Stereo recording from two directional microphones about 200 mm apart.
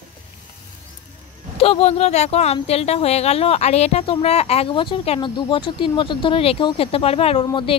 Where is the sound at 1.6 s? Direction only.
30° left (ahead or behind).